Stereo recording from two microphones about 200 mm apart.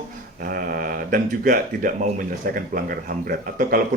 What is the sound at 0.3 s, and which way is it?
Speech, 45° right (ahead or behind).